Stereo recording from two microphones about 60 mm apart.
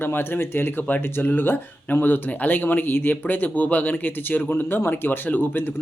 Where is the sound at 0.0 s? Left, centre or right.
Left.